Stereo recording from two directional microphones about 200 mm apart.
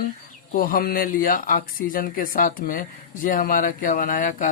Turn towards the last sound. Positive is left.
turn(degrees=40)  # may be behind; listen again after turning